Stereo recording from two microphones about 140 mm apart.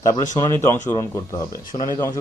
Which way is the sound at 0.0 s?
25° left (ahead or behind).